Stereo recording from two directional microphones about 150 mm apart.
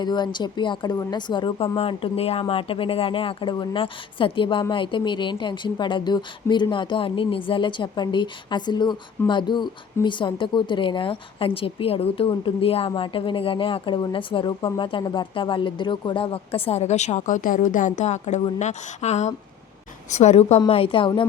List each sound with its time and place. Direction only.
0.0 s speech: 30° left (ahead or behind)